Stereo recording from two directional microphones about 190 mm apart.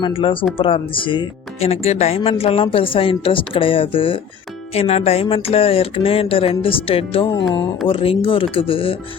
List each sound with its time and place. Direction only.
0.0 s speech: 25° left (ahead or behind)